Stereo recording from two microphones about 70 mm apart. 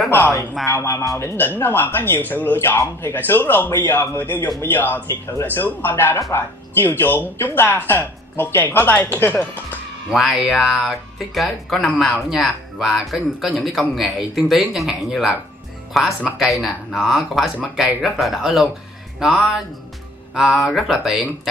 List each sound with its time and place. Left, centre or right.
0.1 s speech: left
0.7 s speech: left
10.0 s speech: centre